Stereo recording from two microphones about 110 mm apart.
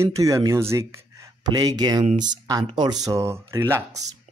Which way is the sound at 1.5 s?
35° right (ahead or behind).